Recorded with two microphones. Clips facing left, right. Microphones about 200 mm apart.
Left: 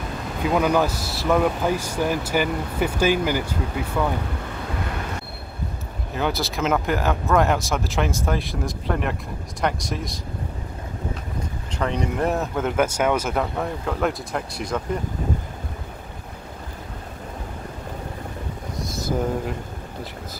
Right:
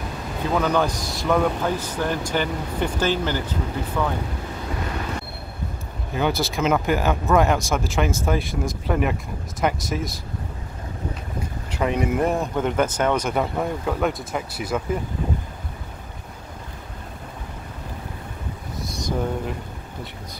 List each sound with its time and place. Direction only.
0.5 s speech: 10° left (ahead or behind)
6.1 s speech: centre (ahead or behind)
11.7 s speech: 10° right (ahead or behind)
18.8 s a sound: centre (ahead or behind)